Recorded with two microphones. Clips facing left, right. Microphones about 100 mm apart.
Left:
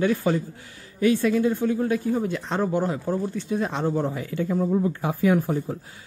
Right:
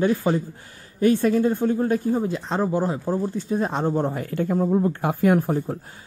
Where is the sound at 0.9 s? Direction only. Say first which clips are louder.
Right 2 dB; 45° right (ahead or behind).